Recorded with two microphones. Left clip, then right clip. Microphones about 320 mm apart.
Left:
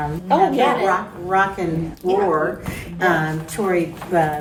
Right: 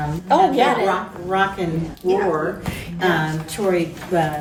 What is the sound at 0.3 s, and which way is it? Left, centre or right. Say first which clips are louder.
Speech: right 1 dB; right.